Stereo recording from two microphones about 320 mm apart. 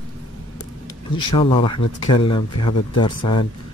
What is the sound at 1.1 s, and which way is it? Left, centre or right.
Speech, centre.